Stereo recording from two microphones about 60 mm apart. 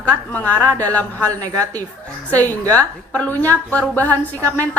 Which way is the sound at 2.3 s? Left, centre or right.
Left.